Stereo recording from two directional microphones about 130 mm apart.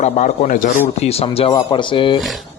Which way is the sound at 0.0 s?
70° left (ahead or behind).